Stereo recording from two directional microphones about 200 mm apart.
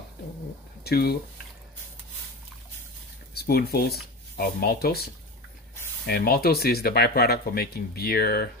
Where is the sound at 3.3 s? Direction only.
50° left (ahead or behind).